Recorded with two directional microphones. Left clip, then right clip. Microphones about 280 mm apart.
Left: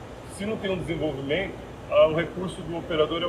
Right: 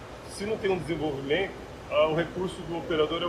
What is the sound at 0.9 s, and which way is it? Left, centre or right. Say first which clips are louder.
A man's voice: left 1 dB; centre.